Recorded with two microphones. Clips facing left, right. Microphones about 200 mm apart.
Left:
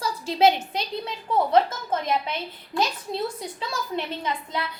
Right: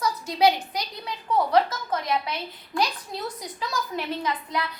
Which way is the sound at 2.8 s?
25° left (ahead or behind).